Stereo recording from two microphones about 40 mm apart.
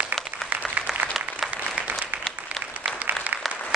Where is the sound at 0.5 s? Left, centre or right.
Right.